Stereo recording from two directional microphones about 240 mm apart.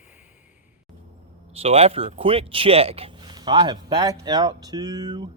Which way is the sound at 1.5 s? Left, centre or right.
Right.